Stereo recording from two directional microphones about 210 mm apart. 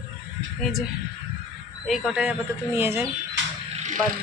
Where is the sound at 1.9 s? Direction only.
5° right (ahead or behind).